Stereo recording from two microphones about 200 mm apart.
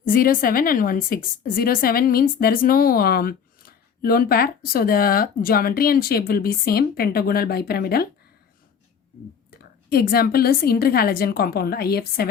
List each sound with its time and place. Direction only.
0.0 s a woman's voice: 45° left (ahead or behind)
9.9 s a woman's voice: 50° left (ahead or behind)